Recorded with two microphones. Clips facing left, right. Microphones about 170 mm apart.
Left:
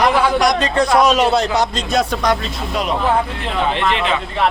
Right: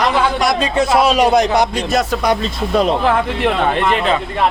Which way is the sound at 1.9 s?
5° right (ahead or behind).